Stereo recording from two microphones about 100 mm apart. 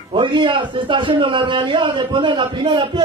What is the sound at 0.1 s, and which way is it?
A man's voice, 55° right (ahead or behind).